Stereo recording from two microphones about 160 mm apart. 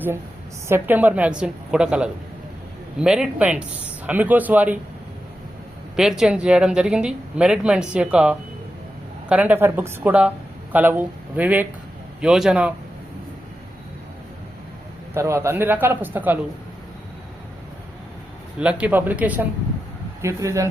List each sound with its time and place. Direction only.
0.7 s speech: 10° right (ahead or behind)
6.0 s speech: 5° right (ahead or behind)
15.1 s speech: 15° right (ahead or behind)
18.6 s speech: 5° right (ahead or behind)